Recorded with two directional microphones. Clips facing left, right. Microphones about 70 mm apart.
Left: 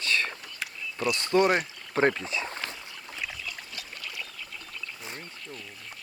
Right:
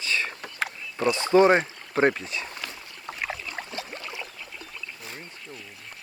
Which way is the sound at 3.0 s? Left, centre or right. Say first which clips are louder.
Right 6 dB; right.